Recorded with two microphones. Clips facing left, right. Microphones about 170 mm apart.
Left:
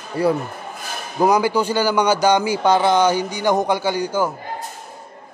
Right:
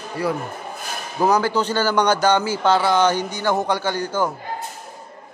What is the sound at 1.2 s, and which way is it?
A man's voice, 15° left (ahead or behind).